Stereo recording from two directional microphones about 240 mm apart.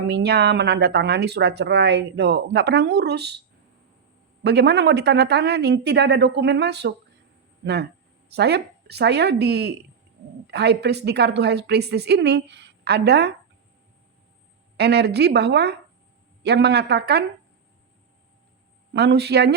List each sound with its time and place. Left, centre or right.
0.1 s speech: right
4.4 s speech: right
14.8 s speech: right
18.9 s speech: right